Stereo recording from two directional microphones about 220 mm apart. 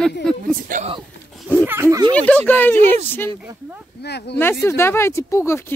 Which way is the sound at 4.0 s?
50° left (ahead or behind).